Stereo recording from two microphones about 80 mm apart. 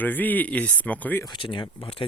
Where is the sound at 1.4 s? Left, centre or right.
Left.